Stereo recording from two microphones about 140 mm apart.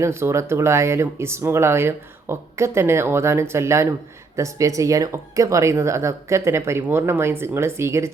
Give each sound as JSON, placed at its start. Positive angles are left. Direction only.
{"t": 0.0, "sound": "speech", "side_deg": -20}